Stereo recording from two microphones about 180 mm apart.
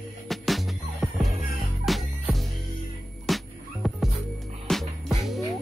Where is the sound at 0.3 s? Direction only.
Centre (ahead or behind).